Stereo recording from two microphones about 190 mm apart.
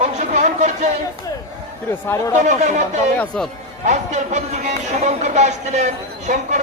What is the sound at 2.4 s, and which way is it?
Speech, 40° right (ahead or behind).